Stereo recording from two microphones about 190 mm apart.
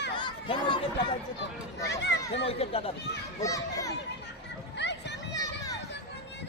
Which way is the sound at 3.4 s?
15° left (ahead or behind).